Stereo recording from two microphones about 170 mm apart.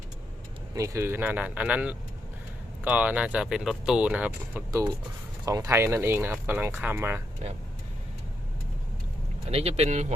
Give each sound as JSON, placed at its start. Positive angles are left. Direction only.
{"t": 0.7, "sound": "speech", "side_deg": -15}
{"t": 9.5, "sound": "speech", "side_deg": -35}